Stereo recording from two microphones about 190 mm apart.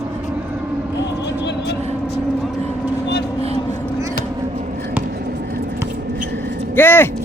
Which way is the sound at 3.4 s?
35° right (ahead or behind).